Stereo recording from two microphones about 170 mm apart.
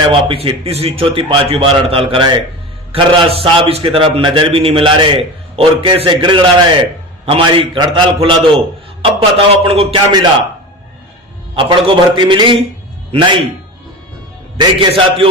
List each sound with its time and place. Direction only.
0.1 s a man's voice: 30° right (ahead or behind)
11.5 s a man's voice: 30° right (ahead or behind)
14.6 s a man's voice: 30° right (ahead or behind)